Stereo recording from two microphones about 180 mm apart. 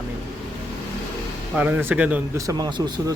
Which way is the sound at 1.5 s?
10° right (ahead or behind).